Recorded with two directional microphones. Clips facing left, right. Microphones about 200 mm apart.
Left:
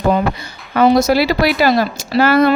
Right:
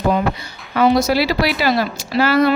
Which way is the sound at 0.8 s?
45° left (ahead or behind).